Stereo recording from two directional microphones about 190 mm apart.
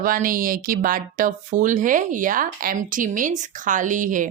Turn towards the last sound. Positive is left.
turn(degrees=-45)  # may be behind; listen again after turning